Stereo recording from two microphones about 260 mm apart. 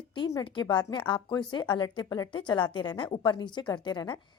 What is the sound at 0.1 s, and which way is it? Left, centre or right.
A woman's voice, centre.